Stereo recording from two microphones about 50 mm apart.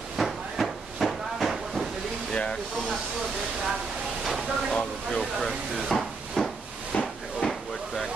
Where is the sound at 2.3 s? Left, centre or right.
Centre.